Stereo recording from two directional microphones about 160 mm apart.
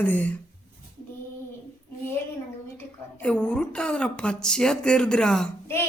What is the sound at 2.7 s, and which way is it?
A woman's voice, 10° left (ahead or behind).